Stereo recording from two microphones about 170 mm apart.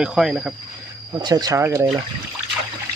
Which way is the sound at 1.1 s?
25° right (ahead or behind).